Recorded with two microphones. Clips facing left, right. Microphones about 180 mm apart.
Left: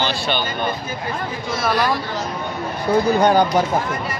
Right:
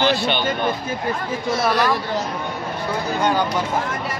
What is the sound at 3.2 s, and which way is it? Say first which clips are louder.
Speech: left 1 dB; 40° left (ahead or behind).